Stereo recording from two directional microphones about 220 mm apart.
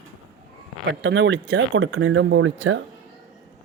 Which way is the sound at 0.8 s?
55° right (ahead or behind).